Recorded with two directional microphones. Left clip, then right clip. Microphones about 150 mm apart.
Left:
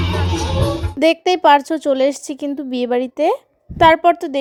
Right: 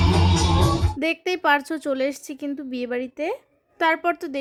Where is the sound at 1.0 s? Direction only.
25° left (ahead or behind).